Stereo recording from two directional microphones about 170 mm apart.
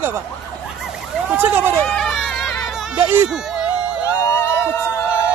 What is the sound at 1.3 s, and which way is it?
Speech, 10° right (ahead or behind).